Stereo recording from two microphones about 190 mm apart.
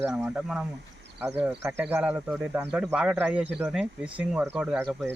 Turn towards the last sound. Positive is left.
turn(degrees=-5)  # may be behind; listen again after turning